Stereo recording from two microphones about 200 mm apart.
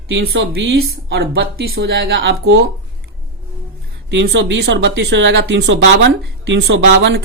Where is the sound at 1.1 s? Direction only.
55° right (ahead or behind).